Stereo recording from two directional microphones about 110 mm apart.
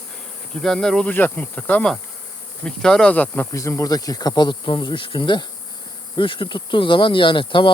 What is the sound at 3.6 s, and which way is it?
Speech, 30° left (ahead or behind).